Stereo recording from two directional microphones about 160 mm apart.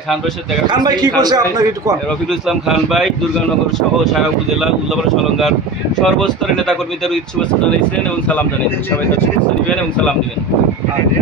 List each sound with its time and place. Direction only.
0.7 s a man's voice: 25° right (ahead or behind)
2.4 s speech: centre (ahead or behind)
6.0 s speech: 5° left (ahead or behind)